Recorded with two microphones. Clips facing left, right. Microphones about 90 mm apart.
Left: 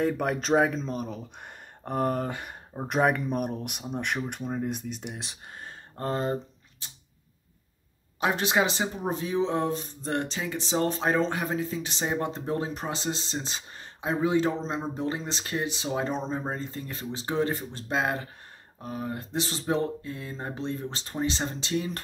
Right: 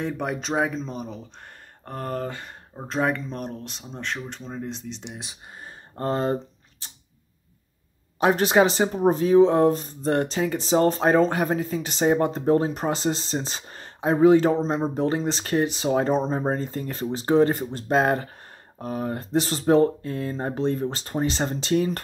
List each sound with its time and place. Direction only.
0.0 s speech: centre (ahead or behind)
5.9 s speech: 30° right (ahead or behind)
8.4 s speech: 35° right (ahead or behind)
15.8 s speech: 50° right (ahead or behind)
16.1 s speech: 35° right (ahead or behind)